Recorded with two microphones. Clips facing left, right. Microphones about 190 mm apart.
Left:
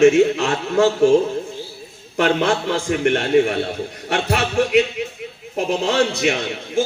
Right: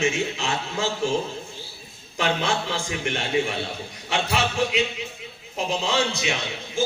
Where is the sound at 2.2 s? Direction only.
60° left (ahead or behind).